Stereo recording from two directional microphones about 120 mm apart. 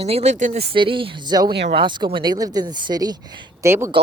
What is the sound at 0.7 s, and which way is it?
Speech, 45° right (ahead or behind).